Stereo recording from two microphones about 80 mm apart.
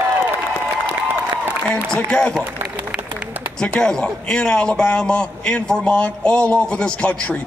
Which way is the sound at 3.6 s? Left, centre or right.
Centre.